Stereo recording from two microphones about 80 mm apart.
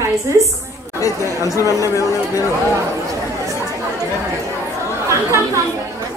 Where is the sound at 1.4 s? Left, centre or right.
Left.